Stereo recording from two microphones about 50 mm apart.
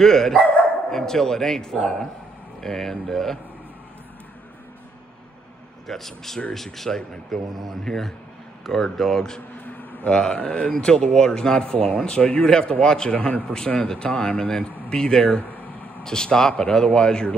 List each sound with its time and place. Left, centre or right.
0.0 s speech: centre
5.9 s speech: centre
9.7 s speech: left